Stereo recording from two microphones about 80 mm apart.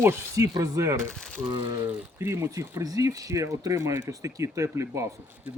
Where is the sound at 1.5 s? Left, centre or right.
Right.